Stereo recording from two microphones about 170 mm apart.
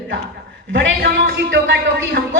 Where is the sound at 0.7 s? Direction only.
80° right.